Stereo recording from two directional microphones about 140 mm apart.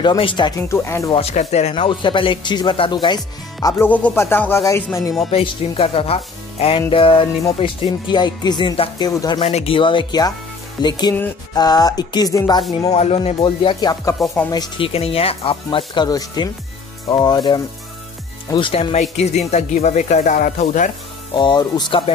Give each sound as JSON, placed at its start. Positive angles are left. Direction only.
{"t": 0.0, "sound": "speech", "side_deg": 35}
{"t": 0.6, "sound": "music", "side_deg": 20}
{"t": 1.1, "sound": "speech", "side_deg": 55}
{"t": 1.8, "sound": "speech", "side_deg": 35}
{"t": 3.6, "sound": "speech", "side_deg": 15}
{"t": 5.3, "sound": "speech", "side_deg": 40}
{"t": 9.0, "sound": "music", "side_deg": 30}
{"t": 9.4, "sound": "speech", "side_deg": 45}
{"t": 11.5, "sound": "music", "side_deg": 30}
{"t": 12.9, "sound": "speech", "side_deg": 50}
{"t": 14.5, "sound": "music", "side_deg": 30}
{"t": 14.9, "sound": "speech", "side_deg": 45}
{"t": 18.5, "sound": "speech", "side_deg": 40}
{"t": 21.3, "sound": "speech", "side_deg": 35}